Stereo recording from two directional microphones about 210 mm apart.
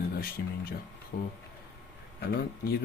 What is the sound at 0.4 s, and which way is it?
Speech, 50° left (ahead or behind).